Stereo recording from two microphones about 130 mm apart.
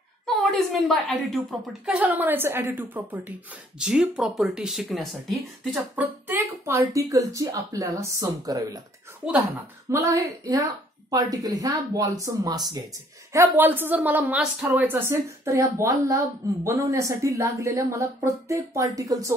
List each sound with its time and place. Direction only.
0.4 s a woman's voice: centre (ahead or behind)
2.0 s speech: 15° right (ahead or behind)
5.9 s a woman's voice: 15° right (ahead or behind)
9.8 s a woman's voice: 25° right (ahead or behind)
13.3 s speech: 20° right (ahead or behind)
14.9 s a woman's voice: 20° right (ahead or behind)